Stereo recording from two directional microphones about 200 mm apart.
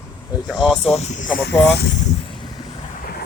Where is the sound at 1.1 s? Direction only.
40° left (ahead or behind).